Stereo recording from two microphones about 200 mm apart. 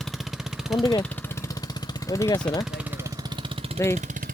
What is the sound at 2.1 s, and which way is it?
Speech, 15° left (ahead or behind).